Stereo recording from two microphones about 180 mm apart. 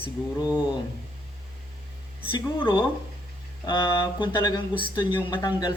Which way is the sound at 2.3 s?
25° left (ahead or behind).